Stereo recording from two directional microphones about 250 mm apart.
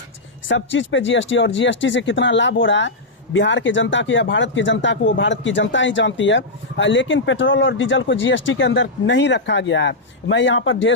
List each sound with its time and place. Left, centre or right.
0.4 s speech: left